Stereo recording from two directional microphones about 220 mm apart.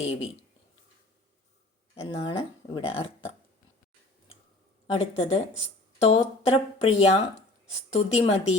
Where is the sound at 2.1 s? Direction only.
25° left (ahead or behind).